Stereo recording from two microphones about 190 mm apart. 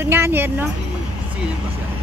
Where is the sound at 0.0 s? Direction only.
10° right (ahead or behind).